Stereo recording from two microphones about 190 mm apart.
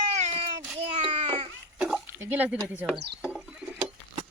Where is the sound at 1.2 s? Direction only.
25° right (ahead or behind).